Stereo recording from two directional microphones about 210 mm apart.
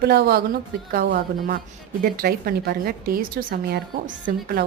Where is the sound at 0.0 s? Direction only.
50° right (ahead or behind).